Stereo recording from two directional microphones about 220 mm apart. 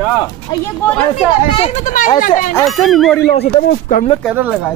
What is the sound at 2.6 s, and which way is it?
Speech, centre (ahead or behind).